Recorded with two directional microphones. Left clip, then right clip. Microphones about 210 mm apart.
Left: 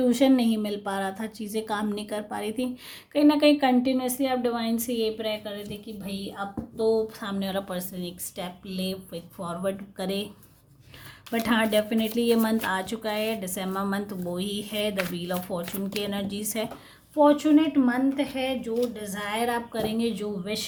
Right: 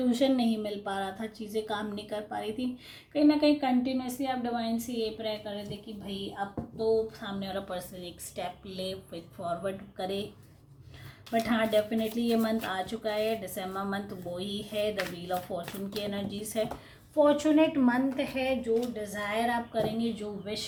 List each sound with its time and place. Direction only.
0.1 s a woman's voice: 40° left (ahead or behind)
6.7 s speech: 45° left (ahead or behind)
11.3 s speech: 35° left (ahead or behind)
17.2 s speech: 20° left (ahead or behind)
19.0 s speech: 35° left (ahead or behind)